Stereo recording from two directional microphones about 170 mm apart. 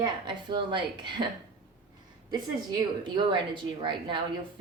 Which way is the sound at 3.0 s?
30° right (ahead or behind).